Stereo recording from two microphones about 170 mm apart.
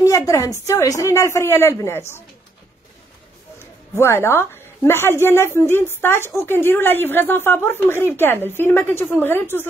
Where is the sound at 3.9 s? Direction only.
15° left (ahead or behind).